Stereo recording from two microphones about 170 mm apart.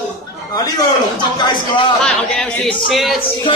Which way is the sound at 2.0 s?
5° left (ahead or behind).